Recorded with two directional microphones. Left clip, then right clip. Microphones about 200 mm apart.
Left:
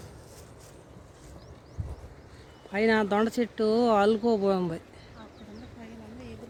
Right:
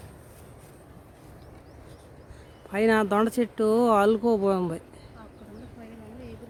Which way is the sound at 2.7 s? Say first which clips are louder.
Right 2 dB; 10° right (ahead or behind).